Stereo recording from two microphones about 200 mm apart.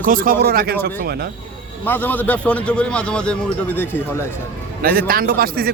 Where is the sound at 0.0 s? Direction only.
45° right (ahead or behind).